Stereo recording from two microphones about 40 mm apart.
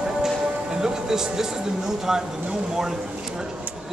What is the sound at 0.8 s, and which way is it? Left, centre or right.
Music, centre.